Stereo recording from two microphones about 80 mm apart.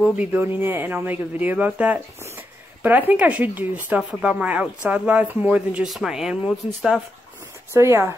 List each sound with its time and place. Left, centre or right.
0.1 s speech: centre
5.9 s speech: centre
7.7 s speech: right